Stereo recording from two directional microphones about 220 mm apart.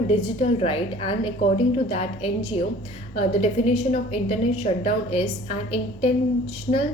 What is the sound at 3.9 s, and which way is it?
A woman's voice, 30° left (ahead or behind).